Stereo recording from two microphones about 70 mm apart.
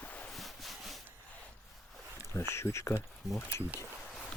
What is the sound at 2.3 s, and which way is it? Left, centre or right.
Speech, left.